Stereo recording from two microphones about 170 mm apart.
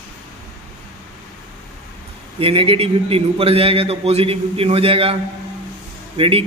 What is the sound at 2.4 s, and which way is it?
A man's voice, 35° right (ahead or behind).